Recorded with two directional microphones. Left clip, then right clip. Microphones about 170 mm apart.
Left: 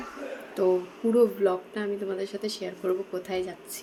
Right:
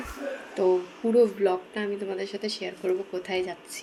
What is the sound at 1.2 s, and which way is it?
A woman's voice, 15° left (ahead or behind).